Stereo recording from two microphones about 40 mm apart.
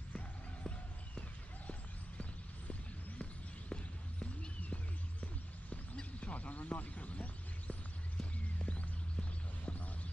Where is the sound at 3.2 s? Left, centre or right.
Left.